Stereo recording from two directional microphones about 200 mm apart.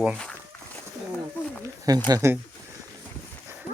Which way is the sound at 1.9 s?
20° right (ahead or behind).